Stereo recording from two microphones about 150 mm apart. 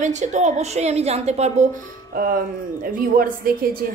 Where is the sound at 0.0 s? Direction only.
50° right (ahead or behind).